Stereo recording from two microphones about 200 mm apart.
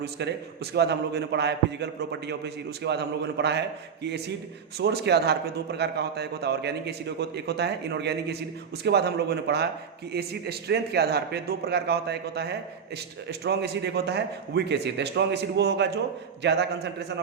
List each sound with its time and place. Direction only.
0.0 s a man's voice: 55° right (ahead or behind)